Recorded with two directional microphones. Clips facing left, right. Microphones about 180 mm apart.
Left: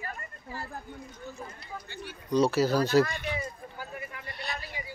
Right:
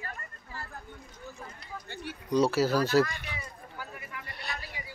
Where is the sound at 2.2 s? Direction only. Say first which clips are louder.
Left 1 dB; 10° right (ahead or behind).